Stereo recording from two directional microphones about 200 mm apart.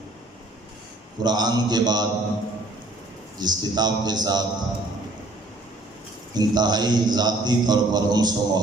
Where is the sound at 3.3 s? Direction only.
20° right (ahead or behind).